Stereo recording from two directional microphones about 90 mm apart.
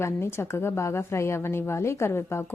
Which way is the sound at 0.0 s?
30° left (ahead or behind).